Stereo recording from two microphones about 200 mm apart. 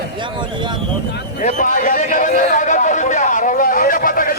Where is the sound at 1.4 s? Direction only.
40° left (ahead or behind).